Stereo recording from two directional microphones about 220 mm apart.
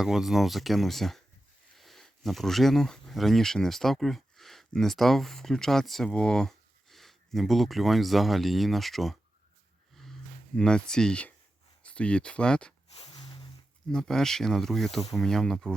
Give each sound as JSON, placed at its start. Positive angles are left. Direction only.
{"t": 0.0, "sound": "speech", "side_deg": 0}
{"t": 9.9, "sound": "a sound", "side_deg": 0}
{"t": 11.8, "sound": "speech", "side_deg": 5}
{"t": 12.9, "sound": "music", "side_deg": 25}
{"t": 13.9, "sound": "speech", "side_deg": 0}